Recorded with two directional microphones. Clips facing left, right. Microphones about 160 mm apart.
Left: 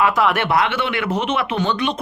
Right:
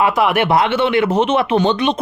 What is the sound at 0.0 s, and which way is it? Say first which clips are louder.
Speech: right 3 dB; 15° right (ahead or behind).